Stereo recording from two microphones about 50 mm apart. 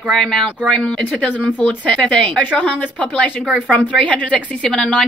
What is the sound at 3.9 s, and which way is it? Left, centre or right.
Speech, left.